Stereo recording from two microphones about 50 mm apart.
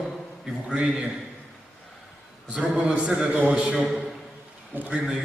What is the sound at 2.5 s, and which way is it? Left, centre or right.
A man's voice, right.